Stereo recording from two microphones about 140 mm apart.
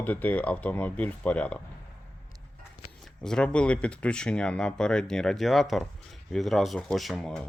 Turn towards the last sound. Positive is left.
turn(degrees=0)  # may be behind; listen again after turning